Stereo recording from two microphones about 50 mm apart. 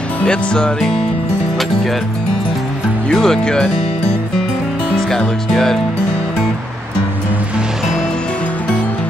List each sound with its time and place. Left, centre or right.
0.2 s speech: centre
3.1 s speech: centre
4.9 s speech: centre